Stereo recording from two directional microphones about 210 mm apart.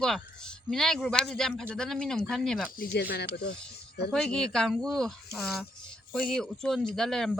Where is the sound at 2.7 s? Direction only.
45° left (ahead or behind).